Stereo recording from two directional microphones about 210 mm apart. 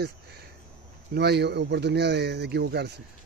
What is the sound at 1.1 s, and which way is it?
Speech, 50° right (ahead or behind).